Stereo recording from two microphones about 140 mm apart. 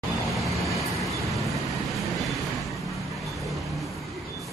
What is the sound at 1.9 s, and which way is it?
Vehicle, centre (ahead or behind).